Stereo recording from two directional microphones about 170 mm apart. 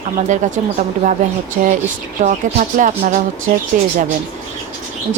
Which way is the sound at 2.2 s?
50° right (ahead or behind).